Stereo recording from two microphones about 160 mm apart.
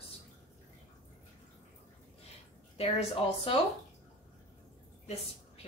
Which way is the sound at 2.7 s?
35° left (ahead or behind).